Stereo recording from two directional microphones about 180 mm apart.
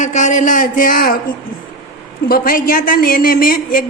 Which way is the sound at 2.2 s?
55° left (ahead or behind).